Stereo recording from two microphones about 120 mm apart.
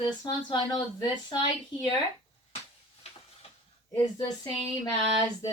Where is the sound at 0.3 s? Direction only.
40° left (ahead or behind).